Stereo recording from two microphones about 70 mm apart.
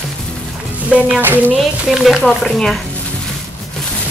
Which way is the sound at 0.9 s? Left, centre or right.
Centre.